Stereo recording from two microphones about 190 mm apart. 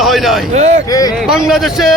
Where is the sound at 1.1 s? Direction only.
5° right (ahead or behind).